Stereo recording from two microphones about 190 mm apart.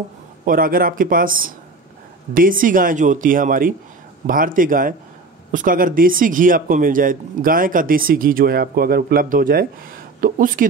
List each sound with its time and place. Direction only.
0.5 s speech: 50° right (ahead or behind)